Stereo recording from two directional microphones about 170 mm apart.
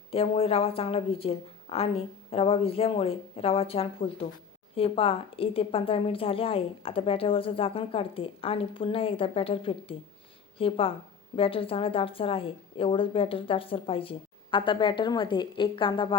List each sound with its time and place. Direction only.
0.1 s a woman's voice: 35° left (ahead or behind)